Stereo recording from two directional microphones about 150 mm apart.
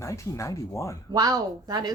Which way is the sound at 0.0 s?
20° left (ahead or behind).